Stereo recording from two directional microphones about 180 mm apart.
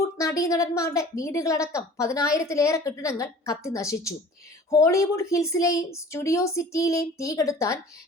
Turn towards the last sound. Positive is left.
turn(degrees=15)  # may be behind; listen again after turning